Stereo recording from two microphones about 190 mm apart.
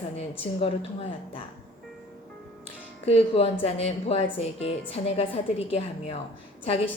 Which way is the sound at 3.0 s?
30° left (ahead or behind).